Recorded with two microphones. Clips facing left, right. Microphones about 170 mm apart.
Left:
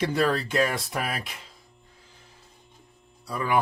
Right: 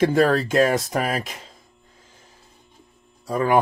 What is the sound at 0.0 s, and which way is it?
Speech, 45° right (ahead or behind).